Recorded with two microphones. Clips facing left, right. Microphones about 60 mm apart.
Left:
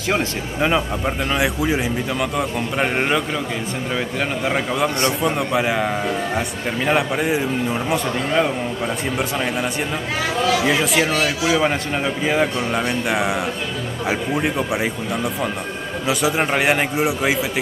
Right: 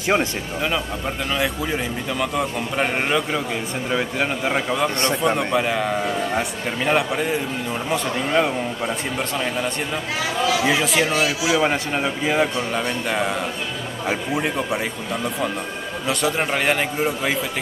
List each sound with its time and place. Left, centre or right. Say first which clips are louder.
0.6 s a man's voice: left 5 dB; centre
10.5 s a man's voice: left 1 dB; centre
16.1 s a man's voice: left 2 dB; centre